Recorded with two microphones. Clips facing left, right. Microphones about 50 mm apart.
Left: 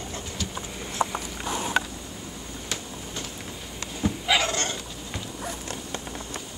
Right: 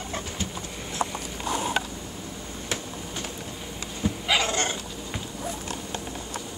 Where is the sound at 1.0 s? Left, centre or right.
Centre.